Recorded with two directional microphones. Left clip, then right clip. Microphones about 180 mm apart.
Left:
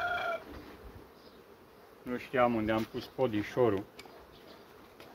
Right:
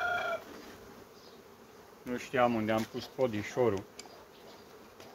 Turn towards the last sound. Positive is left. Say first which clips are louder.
# left 1 dB
turn(degrees=30)  # may be behind; listen again after turning